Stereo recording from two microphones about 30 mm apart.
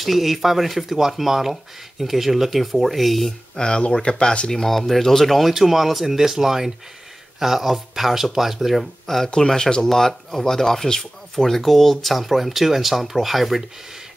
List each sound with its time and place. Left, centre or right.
0.0 s speech: centre
3.5 s speech: left
4.5 s speech: centre
5.5 s speech: centre
9.0 s speech: centre